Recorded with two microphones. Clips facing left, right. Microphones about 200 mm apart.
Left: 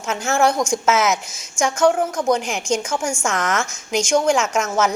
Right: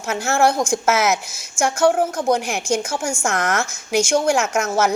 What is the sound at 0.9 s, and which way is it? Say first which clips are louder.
Speech: even; 10° right (ahead or behind).